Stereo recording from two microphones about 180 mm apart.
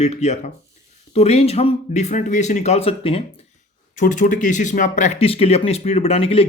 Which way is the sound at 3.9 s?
45° left (ahead or behind).